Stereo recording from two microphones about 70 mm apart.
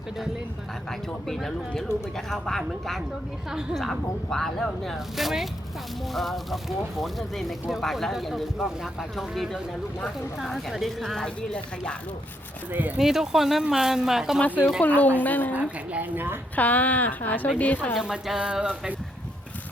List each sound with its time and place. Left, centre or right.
0.9 s speech: centre
4.3 s speech: centre
13.0 s speech: centre
14.4 s speech: left
15.5 s a woman's voice: right
16.6 s speech: left
17.9 s speech: centre